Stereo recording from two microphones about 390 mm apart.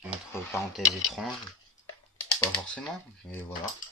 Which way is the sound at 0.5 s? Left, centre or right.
Centre.